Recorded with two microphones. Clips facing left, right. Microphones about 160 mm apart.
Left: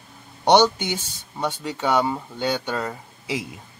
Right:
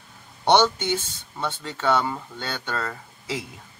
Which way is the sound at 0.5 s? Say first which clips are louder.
Left 2 dB; 10° left (ahead or behind).